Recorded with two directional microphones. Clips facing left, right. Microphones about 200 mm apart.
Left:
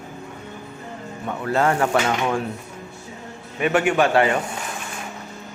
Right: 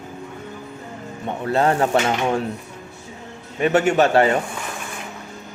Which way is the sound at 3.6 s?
25° right (ahead or behind).